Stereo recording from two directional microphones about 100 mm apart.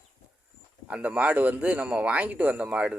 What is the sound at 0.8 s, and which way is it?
Speech, 15° right (ahead or behind).